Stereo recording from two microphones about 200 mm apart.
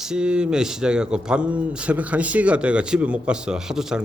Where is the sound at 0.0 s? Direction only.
5° right (ahead or behind).